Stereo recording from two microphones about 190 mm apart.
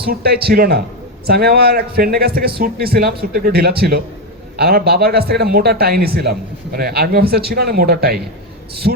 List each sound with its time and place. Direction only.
0.0 s a man's voice: 55° right (ahead or behind)